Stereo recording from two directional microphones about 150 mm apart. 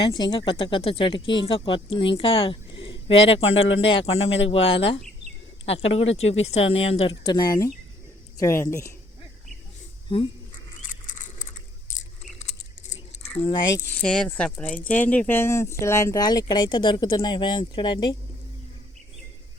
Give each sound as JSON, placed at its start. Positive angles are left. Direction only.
{"t": 0.0, "sound": "speech", "side_deg": 35}
{"t": 7.3, "sound": "speech", "side_deg": 25}
{"t": 10.8, "sound": "a sound", "side_deg": 60}
{"t": 14.0, "sound": "speech", "side_deg": 5}